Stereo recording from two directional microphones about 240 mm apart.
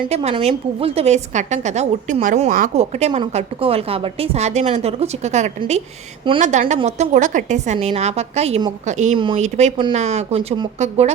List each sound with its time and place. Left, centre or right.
0.1 s a woman's voice: right